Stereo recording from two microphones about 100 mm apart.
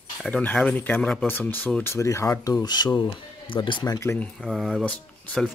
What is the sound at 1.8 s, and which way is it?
Speech, 30° left (ahead or behind).